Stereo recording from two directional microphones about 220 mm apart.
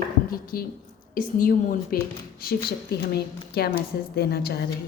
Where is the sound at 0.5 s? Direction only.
40° left (ahead or behind).